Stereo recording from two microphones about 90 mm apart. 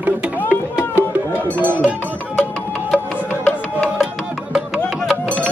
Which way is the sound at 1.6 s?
20° right (ahead or behind).